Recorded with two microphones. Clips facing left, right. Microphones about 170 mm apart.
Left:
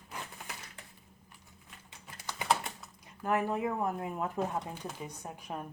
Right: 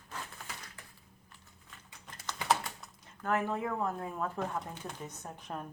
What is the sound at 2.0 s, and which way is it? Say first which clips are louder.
Typing: even; 10° left (ahead or behind).